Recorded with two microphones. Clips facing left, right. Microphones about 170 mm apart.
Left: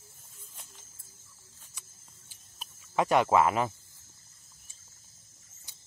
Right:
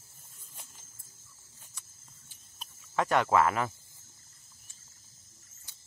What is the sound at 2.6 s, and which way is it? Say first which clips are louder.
Speech: left 2 dB; 15° left (ahead or behind).